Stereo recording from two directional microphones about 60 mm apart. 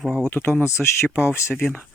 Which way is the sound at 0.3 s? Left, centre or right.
Left.